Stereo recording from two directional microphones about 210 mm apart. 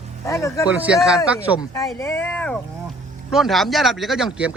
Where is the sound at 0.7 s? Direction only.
5° right (ahead or behind).